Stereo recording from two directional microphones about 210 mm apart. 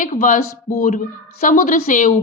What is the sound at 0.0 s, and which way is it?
A woman's voice, 40° left (ahead or behind).